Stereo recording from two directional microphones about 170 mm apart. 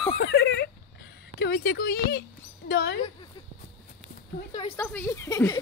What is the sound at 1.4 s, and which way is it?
A woman's voice, 65° left (ahead or behind).